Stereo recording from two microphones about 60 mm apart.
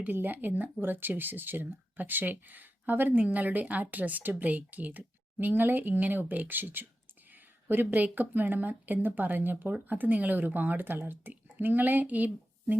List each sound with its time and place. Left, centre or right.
0.0 s speech: right